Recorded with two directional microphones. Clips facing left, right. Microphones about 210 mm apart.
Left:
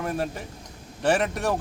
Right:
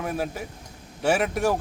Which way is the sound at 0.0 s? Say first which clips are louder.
Even; 5° right (ahead or behind).